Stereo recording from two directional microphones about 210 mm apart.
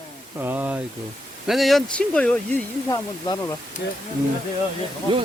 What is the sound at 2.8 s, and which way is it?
Speech, 15° left (ahead or behind).